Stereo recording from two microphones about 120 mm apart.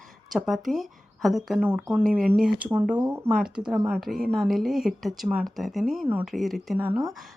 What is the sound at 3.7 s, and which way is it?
Speech, 15° right (ahead or behind).